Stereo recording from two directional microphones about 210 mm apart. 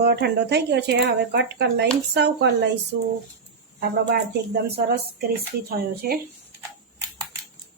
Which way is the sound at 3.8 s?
50° right (ahead or behind).